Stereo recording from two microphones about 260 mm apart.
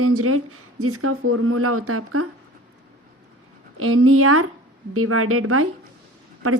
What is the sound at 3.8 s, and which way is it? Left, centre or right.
A woman's voice, right.